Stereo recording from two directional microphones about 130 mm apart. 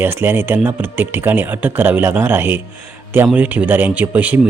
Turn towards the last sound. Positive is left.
turn(degrees=-15)  # may be behind; listen again after turning